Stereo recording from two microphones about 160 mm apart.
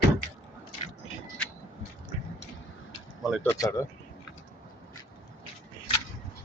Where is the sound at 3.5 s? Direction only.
20° left (ahead or behind).